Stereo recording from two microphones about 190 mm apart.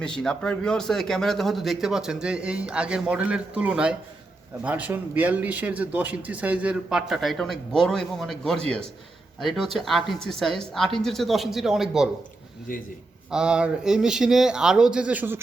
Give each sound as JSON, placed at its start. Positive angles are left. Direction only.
{"t": 0.0, "sound": "speech", "side_deg": 5}
{"t": 12.7, "sound": "a man's voice", "side_deg": 45}
{"t": 13.3, "sound": "speech", "side_deg": -5}